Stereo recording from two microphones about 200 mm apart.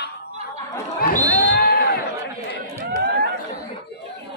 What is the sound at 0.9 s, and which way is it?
Music, 45° left (ahead or behind).